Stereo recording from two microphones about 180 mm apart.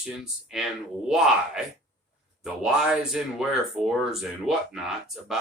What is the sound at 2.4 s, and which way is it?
Speech, 5° right (ahead or behind).